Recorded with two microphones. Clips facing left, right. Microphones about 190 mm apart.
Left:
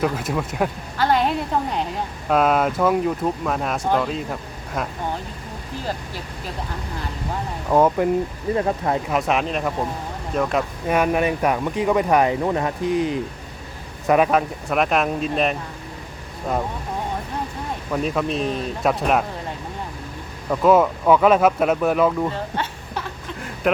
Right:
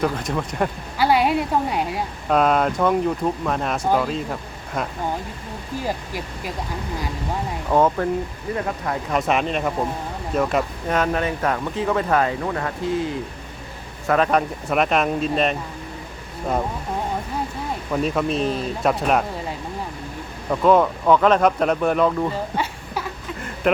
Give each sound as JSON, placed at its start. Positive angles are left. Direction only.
{"t": 0.0, "sound": "speech", "side_deg": 5}
{"t": 0.9, "sound": "a woman's voice", "side_deg": -10}
{"t": 2.3, "sound": "speech", "side_deg": 5}
{"t": 5.8, "sound": "speech", "side_deg": -10}
{"t": 7.7, "sound": "speech", "side_deg": 10}
{"t": 8.5, "sound": "speech", "side_deg": 25}
{"t": 9.0, "sound": "speech", "side_deg": 0}
{"t": 10.8, "sound": "speech", "side_deg": 10}
{"t": 14.3, "sound": "speech", "side_deg": 0}
{"t": 17.9, "sound": "speech", "side_deg": 0}
{"t": 22.3, "sound": "a sound", "side_deg": -10}